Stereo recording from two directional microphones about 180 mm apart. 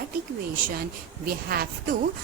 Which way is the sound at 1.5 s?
55° right (ahead or behind).